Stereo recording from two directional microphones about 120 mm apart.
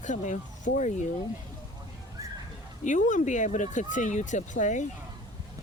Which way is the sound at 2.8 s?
90° left.